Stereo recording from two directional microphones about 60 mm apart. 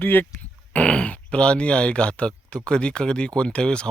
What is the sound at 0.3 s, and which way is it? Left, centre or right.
Speech, left.